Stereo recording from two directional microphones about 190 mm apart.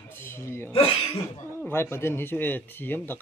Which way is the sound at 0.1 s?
10° left (ahead or behind).